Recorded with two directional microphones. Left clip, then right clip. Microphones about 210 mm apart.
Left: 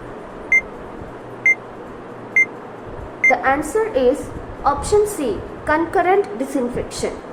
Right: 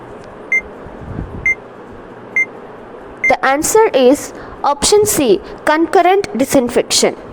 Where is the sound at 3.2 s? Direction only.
50° right (ahead or behind).